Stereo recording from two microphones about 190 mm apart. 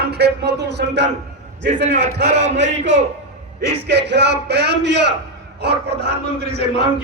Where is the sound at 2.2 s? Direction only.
35° right (ahead or behind).